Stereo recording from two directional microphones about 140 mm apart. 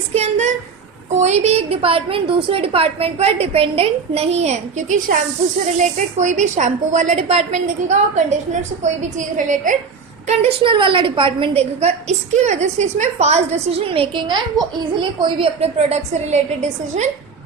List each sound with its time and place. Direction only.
0.1 s a sound: 50° right (ahead or behind)
1.2 s a woman's voice: 50° right (ahead or behind)
6.1 s a woman's voice: 60° right (ahead or behind)
10.2 s a woman's voice: 45° right (ahead or behind)
15.2 s a woman's voice: 45° right (ahead or behind)